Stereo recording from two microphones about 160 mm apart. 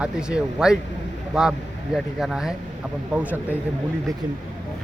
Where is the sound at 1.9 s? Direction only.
Centre (ahead or behind).